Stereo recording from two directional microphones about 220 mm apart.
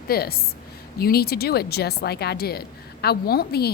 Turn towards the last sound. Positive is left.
turn(degrees=45)  # may be behind; listen again after turning